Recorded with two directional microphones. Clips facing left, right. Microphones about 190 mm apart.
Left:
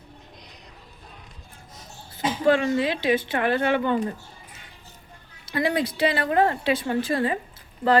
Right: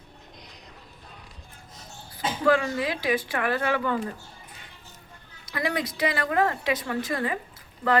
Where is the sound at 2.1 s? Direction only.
25° left (ahead or behind).